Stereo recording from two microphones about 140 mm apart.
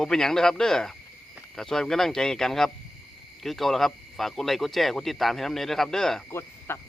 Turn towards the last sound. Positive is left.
turn(degrees=20)  # may be behind; listen again after turning